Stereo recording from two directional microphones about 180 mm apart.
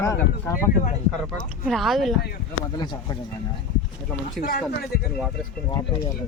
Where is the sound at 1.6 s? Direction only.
Centre (ahead or behind).